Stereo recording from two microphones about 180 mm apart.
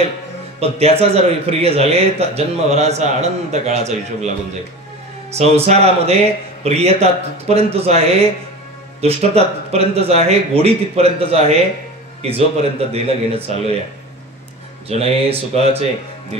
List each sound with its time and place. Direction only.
0.6 s a man's voice: 35° right (ahead or behind)
5.3 s a man's voice: 35° right (ahead or behind)
14.9 s a man's voice: 35° right (ahead or behind)